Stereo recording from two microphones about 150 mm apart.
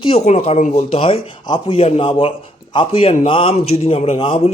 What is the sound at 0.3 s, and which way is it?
Speech, 45° left (ahead or behind).